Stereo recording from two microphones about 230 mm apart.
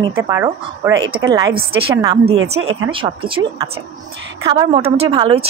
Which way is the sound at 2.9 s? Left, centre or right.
Right.